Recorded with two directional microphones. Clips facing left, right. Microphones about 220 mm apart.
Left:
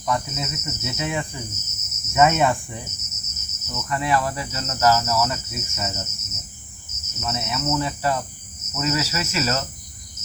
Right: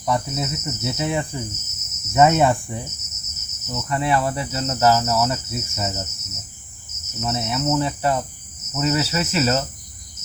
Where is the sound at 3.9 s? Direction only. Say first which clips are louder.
Right 2 dB; 30° right (ahead or behind).